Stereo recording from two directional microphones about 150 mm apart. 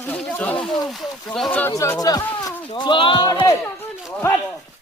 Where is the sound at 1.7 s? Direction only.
20° left (ahead or behind).